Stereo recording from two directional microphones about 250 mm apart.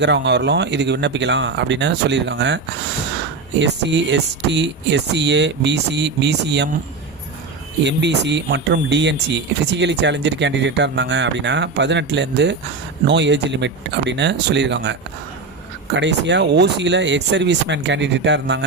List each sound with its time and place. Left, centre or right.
0.0 s speech: right
3.6 s speech: right
7.9 s speech: right
16.0 s speech: right